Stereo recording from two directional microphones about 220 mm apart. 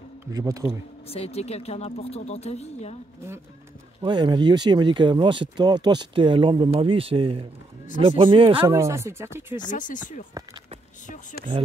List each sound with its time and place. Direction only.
0.3 s speech: 15° right (ahead or behind)
1.0 s speech: 25° left (ahead or behind)
4.0 s speech: 20° right (ahead or behind)
8.6 s speech: 10° right (ahead or behind)
9.7 s speech: 35° left (ahead or behind)